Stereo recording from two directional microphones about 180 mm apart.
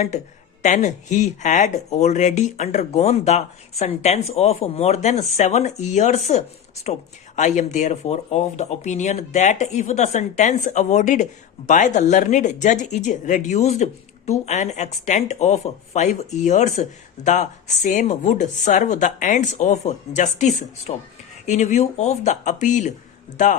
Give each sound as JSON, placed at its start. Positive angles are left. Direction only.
{"t": 0.6, "sound": "speech", "side_deg": 40}